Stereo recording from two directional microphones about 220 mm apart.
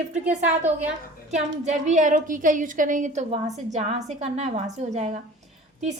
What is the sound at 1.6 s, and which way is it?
A woman's voice, 35° right (ahead or behind).